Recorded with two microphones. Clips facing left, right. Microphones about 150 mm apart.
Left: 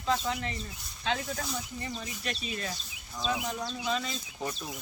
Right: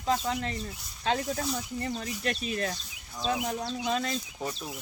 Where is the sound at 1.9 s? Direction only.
55° right (ahead or behind).